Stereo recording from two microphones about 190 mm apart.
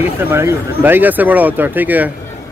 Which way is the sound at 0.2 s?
10° right (ahead or behind).